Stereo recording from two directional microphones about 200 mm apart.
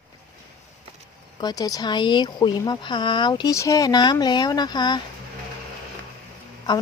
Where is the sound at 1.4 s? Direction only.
20° left (ahead or behind).